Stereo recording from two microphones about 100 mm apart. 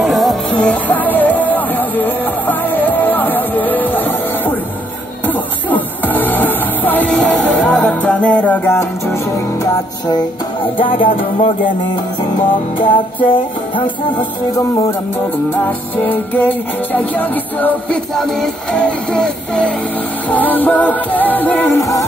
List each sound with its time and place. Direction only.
0.0 s music: centre (ahead or behind)
0.5 s music: 15° left (ahead or behind)
5.2 s music: 20° left (ahead or behind)
10.6 s music: 60° left (ahead or behind)
12.7 s music: 60° left (ahead or behind)
15.5 s music: 20° left (ahead or behind)
18.1 s music: 5° left (ahead or behind)